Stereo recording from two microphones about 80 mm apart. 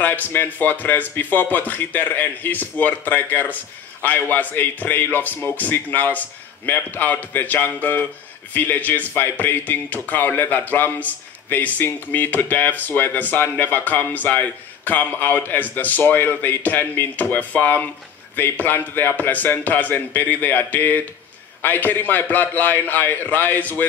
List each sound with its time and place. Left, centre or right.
0.3 s speech: left